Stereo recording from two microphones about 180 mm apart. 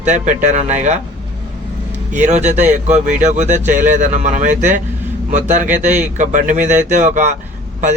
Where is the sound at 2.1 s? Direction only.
40° right (ahead or behind).